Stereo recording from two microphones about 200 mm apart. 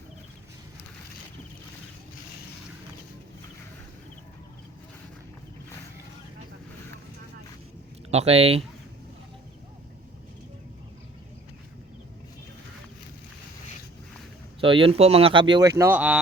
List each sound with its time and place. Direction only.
8.1 s speech: 30° right (ahead or behind)
14.6 s speech: 25° right (ahead or behind); by 16.2 s 5° right (ahead or behind)